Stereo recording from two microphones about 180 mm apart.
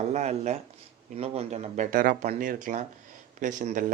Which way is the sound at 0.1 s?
40° right (ahead or behind).